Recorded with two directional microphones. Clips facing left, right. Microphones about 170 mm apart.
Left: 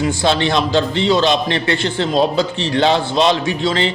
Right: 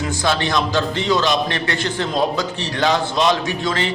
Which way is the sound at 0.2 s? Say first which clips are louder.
Even; 25° left (ahead or behind).